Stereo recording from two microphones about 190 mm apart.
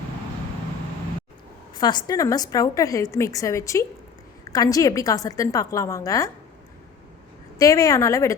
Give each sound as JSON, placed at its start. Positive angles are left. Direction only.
{"t": 1.7, "sound": "a woman's voice", "side_deg": 20}
{"t": 7.6, "sound": "a woman's voice", "side_deg": 15}